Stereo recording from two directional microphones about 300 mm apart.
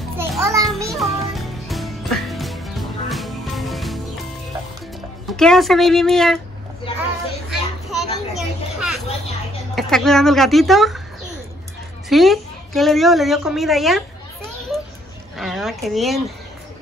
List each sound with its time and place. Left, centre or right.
0.2 s a sound: centre
0.8 s music: centre
5.2 s speech: centre
7.9 s a sound: centre
9.8 s speech: centre
12.1 s a woman's voice: centre